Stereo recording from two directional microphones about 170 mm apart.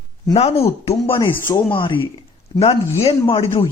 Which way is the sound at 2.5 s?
35° left (ahead or behind).